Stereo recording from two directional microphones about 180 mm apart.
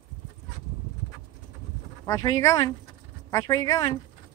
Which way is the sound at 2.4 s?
20° left (ahead or behind).